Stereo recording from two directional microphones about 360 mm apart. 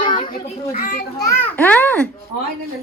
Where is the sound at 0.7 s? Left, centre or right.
Left.